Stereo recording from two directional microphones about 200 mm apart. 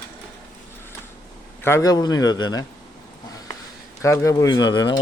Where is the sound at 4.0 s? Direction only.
15° left (ahead or behind).